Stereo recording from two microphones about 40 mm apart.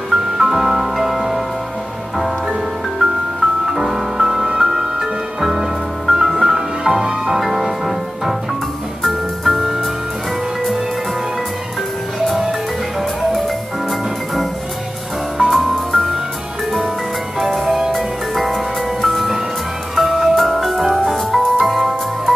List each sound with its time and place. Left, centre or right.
0.1 s music: centre
3.0 s music: centre
13.8 s music: centre
17.4 s music: centre
20.3 s music: centre